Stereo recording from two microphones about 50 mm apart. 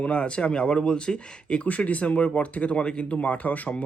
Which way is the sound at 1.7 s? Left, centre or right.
Left.